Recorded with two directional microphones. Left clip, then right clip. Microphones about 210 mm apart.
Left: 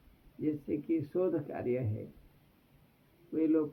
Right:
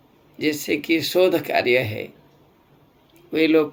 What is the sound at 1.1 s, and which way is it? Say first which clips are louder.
Speech: right 15 dB; 20° right (ahead or behind).